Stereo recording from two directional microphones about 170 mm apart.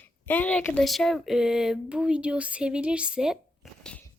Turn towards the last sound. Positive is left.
turn(degrees=0)  # may be behind; listen again after turning